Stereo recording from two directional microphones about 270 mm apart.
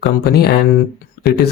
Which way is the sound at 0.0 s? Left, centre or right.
Left.